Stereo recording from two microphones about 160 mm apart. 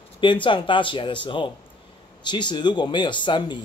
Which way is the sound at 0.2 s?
30° left (ahead or behind).